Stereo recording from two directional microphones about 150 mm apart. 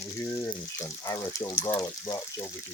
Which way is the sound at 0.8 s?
20° left (ahead or behind).